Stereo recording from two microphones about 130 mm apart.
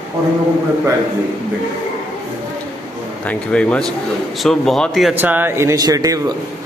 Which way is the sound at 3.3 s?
10° left (ahead or behind).